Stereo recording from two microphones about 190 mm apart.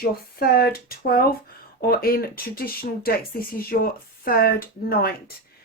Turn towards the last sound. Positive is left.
turn(degrees=55)  # may be behind; listen again after turning